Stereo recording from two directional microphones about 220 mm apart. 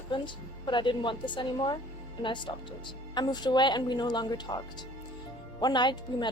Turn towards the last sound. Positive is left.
turn(degrees=20)  # may be behind; listen again after turning